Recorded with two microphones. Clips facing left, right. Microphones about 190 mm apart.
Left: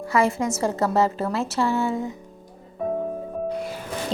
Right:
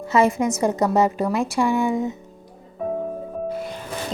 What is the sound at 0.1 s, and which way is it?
A woman's voice, 20° right (ahead or behind).